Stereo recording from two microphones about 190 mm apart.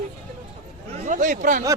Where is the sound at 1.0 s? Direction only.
40° right (ahead or behind).